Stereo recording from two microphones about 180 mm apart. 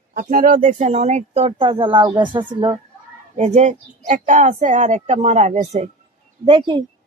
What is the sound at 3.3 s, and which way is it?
Speech, 40° right (ahead or behind).